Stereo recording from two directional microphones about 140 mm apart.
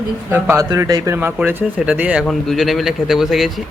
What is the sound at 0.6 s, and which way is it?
Speech, 25° right (ahead or behind).